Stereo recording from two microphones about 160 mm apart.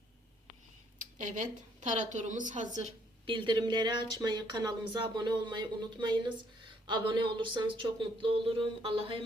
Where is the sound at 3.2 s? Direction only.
30° right (ahead or behind).